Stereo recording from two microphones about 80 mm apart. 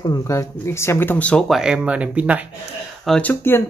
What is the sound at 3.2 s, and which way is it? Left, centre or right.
Speech, left.